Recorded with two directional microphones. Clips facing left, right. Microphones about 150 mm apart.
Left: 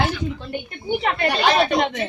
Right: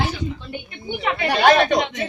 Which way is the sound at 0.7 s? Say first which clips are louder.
Left 2 dB; 45° left (ahead or behind).